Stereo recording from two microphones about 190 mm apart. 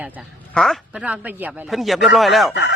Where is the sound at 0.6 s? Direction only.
Centre (ahead or behind).